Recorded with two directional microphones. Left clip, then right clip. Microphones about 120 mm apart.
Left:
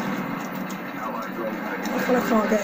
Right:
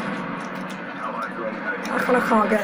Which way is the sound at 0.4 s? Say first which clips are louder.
Right 1 dB; 35° left (ahead or behind).